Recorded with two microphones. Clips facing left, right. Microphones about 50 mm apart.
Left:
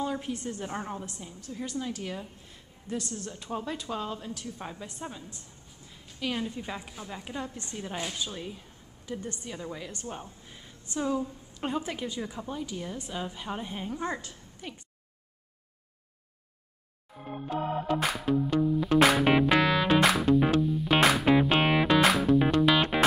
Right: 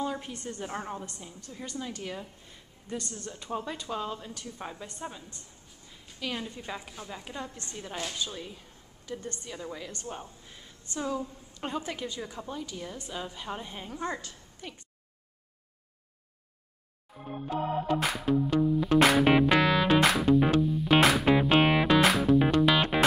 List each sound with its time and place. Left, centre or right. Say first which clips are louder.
0.0 s a woman's voice: left 2 dB; centre
9.2 s a woman's voice: left 1 dB; centre
9.5 s a woman's voice: even; centre
17.5 s music: even; centre